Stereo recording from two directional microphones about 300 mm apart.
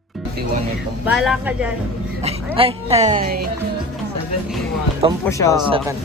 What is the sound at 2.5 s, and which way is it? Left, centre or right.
Speech, centre.